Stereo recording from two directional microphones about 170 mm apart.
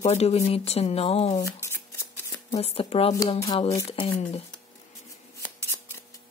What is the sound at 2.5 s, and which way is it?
Speech, 35° left (ahead or behind).